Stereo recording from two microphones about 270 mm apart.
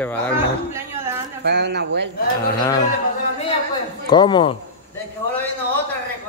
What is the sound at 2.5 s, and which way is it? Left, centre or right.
Speech, centre.